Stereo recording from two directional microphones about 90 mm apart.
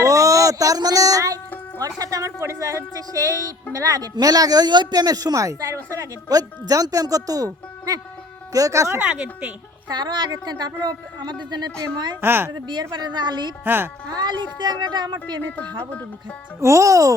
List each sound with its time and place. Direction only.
0.0 s music: 40° right (ahead or behind)
2.0 s speech: 40° right (ahead or behind)
9.0 s a woman's voice: 15° right (ahead or behind)
9.9 s speech: 55° right (ahead or behind)
12.2 s a woman's voice: 25° right (ahead or behind)
12.5 s speech: 55° right (ahead or behind)
13.7 s a woman's voice: 25° right (ahead or behind)
14.1 s speech: 50° right (ahead or behind)
16.6 s speech: 35° right (ahead or behind)